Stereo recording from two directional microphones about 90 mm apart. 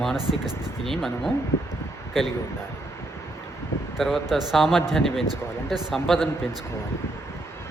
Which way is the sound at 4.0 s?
5° right (ahead or behind).